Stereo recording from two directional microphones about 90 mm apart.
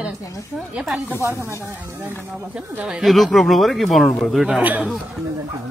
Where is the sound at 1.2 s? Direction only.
30° right (ahead or behind).